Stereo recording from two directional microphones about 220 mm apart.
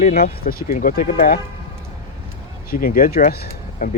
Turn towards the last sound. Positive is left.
turn(degrees=40)  # may be behind; listen again after turning